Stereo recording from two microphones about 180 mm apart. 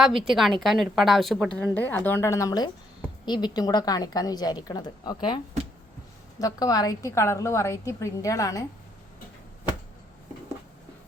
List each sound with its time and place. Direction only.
0.0 s a woman's voice: centre (ahead or behind); by 5.4 s 25° left (ahead or behind)
6.4 s a woman's voice: 20° left (ahead or behind)